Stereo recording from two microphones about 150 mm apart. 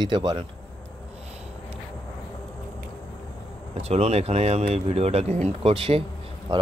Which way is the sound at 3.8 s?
45° right (ahead or behind).